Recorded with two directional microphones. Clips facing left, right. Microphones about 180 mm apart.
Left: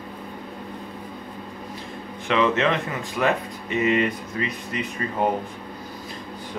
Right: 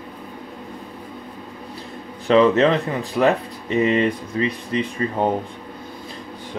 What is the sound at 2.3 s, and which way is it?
Speech, 35° right (ahead or behind).